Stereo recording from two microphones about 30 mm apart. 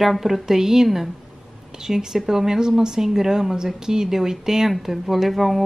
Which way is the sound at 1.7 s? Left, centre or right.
Right.